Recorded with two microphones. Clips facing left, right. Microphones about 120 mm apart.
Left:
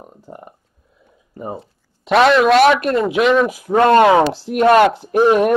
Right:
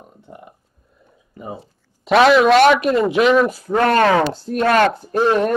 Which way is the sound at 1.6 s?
Centre (ahead or behind).